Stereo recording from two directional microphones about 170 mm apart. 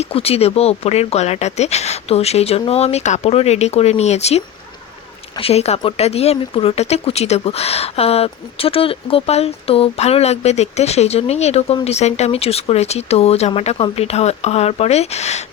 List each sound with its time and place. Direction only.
0.0 s speech: 35° left (ahead or behind)